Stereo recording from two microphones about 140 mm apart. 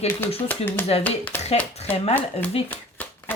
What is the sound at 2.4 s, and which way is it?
Speech, 45° left (ahead or behind).